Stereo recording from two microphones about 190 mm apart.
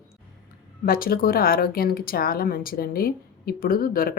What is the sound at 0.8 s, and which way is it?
Speech, 50° left (ahead or behind).